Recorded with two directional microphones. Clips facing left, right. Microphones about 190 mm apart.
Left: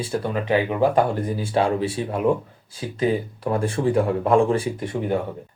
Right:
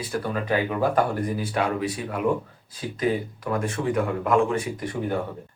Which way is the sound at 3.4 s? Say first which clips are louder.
Left 5 dB; 30° left (ahead or behind).